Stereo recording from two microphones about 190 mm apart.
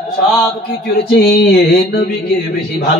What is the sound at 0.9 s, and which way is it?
Mantra, 60° left (ahead or behind).